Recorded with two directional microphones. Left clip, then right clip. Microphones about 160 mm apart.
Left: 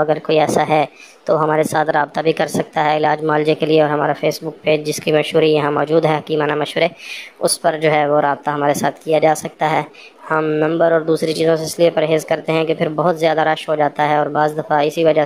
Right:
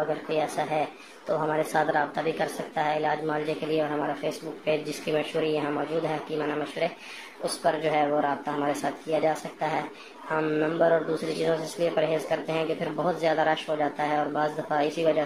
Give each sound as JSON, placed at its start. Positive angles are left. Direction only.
{"t": 0.3, "sound": "a woman's voice", "side_deg": 45}